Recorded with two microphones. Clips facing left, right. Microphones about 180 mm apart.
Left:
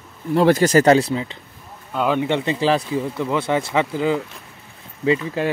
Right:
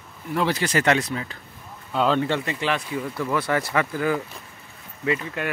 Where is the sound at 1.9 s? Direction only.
10° left (ahead or behind).